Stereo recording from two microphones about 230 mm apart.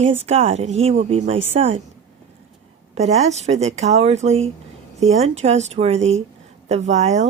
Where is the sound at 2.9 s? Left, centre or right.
Right.